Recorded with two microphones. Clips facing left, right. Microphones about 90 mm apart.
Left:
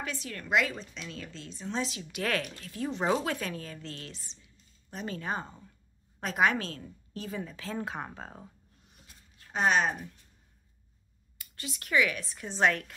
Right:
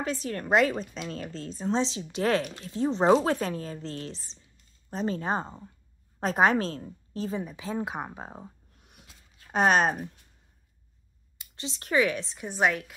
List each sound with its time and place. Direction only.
0.0 s a woman's voice: 35° right (ahead or behind)
1.8 s a woman's voice: 25° right (ahead or behind)
7.3 s speech: 15° right (ahead or behind)
8.8 s writing: 65° right (ahead or behind); by 10.0 s 45° right (ahead or behind)
11.3 s a woman's voice: 25° right (ahead or behind)
12.4 s speech: 10° right (ahead or behind)